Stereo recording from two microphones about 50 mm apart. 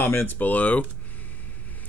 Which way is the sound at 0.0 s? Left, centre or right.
Left.